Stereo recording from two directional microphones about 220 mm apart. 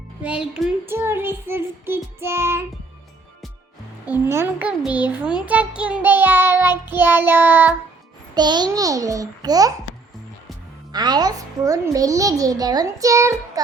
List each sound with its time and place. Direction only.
0.2 s child singing: 5° right (ahead or behind)
4.0 s child singing: 10° right (ahead or behind)
8.4 s child singing: 20° right (ahead or behind)
10.9 s child singing: 20° right (ahead or behind)